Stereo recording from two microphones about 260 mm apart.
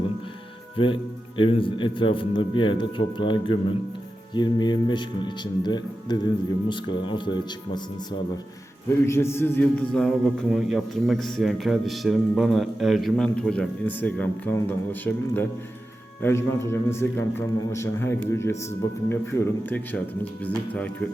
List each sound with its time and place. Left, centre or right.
0.8 s a man's voice: centre
9.0 s a man's voice: centre